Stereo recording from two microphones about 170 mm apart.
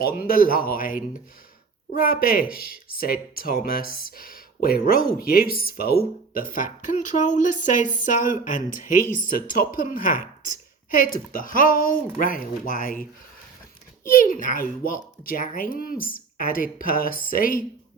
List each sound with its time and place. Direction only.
0.2 s speech: 60° left (ahead or behind)
11.3 s speech: 55° left (ahead or behind)
14.1 s speech: 55° left (ahead or behind)